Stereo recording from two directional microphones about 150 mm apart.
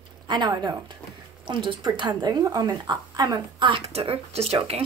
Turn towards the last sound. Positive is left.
turn(degrees=-40)  # may be behind; listen again after turning